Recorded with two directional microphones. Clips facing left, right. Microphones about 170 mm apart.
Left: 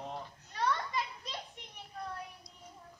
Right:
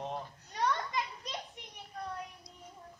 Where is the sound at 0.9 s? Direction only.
15° right (ahead or behind).